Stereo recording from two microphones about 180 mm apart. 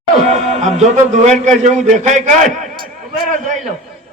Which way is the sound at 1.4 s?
40° right (ahead or behind).